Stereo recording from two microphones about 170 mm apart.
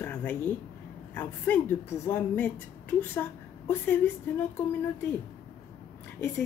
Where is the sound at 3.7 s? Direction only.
10° left (ahead or behind).